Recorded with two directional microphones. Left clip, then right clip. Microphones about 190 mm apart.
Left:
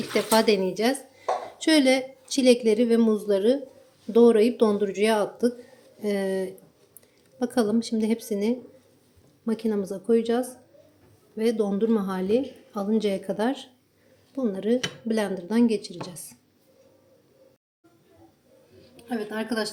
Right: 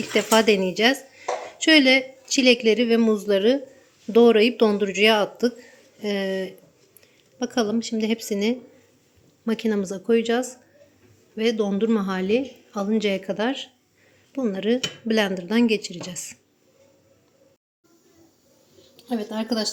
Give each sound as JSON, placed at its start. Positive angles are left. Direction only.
{"t": 0.1, "sound": "a woman's voice", "side_deg": -10}
{"t": 19.0, "sound": "speech", "side_deg": -30}